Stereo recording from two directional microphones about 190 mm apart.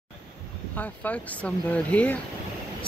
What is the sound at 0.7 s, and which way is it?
Speech, 10° left (ahead or behind).